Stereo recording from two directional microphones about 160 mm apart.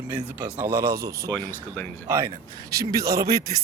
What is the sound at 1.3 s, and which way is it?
Speech, 10° left (ahead or behind).